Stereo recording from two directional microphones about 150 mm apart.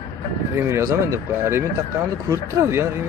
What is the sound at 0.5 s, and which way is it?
Speech, 15° right (ahead or behind).